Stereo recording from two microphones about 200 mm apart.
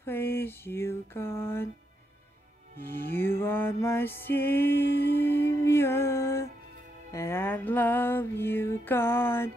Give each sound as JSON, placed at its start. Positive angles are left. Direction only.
{"t": 0.0, "sound": "music", "side_deg": 10}
{"t": 2.8, "sound": "music", "side_deg": 10}
{"t": 4.7, "sound": "music", "side_deg": 55}
{"t": 5.2, "sound": "music", "side_deg": 10}